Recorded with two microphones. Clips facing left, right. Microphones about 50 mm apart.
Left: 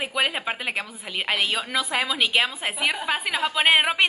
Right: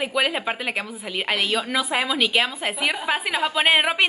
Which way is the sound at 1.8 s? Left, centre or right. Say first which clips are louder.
Even; centre.